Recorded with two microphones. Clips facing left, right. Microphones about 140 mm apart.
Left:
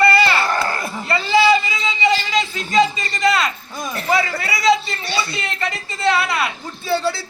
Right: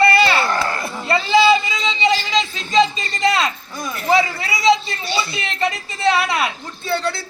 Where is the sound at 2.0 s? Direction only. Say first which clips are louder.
Even; 20° right (ahead or behind).